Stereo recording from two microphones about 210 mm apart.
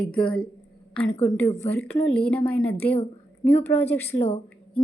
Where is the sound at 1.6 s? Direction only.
10° left (ahead or behind).